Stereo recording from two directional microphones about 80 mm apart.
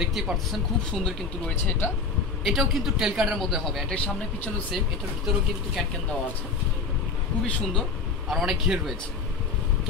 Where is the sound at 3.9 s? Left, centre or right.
Centre.